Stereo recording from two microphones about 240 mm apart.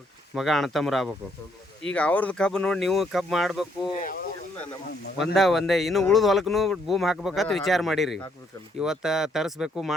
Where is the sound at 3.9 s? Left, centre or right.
Left.